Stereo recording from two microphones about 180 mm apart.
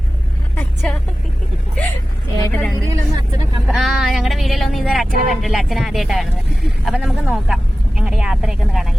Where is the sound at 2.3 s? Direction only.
15° left (ahead or behind).